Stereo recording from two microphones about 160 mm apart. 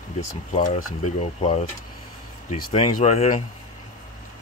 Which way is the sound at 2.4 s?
55° left (ahead or behind).